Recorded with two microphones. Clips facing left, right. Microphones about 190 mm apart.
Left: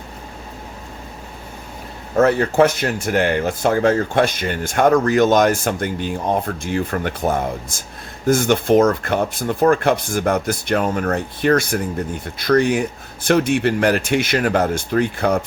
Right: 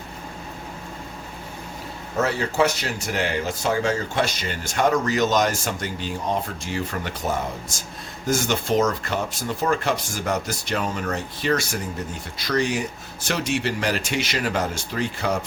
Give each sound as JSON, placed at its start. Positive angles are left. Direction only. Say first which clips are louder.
{"t": 2.1, "sound": "speech", "louder": "left 8 dB", "side_deg": 55}